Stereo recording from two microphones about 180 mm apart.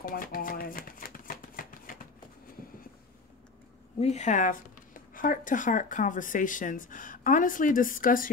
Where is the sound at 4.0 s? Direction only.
40° left (ahead or behind).